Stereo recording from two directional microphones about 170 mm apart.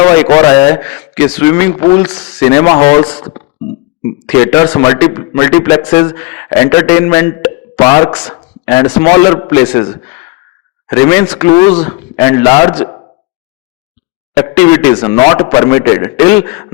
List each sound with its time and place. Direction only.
0.0 s a man's voice: 20° left (ahead or behind)
1.7 s a man's voice: 25° left (ahead or behind)
11.4 s a man's voice: 25° left (ahead or behind)
14.3 s a man's voice: 15° left (ahead or behind)